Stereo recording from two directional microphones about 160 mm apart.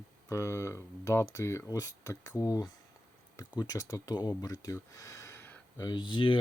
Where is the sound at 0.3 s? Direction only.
20° left (ahead or behind).